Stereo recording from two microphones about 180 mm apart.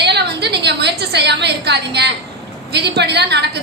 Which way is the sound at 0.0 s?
70° right (ahead or behind).